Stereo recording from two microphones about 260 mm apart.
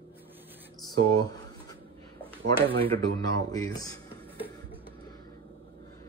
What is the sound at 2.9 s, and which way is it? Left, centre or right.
Speech, centre.